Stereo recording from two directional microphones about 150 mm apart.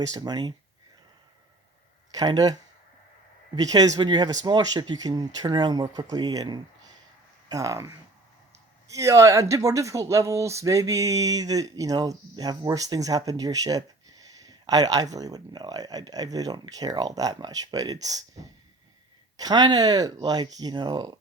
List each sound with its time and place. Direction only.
0.0 s speech: 25° right (ahead or behind)
2.1 s speech: 25° right (ahead or behind)
19.4 s speech: 25° right (ahead or behind)